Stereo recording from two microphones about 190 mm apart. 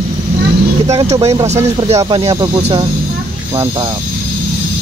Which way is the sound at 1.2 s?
15° right (ahead or behind).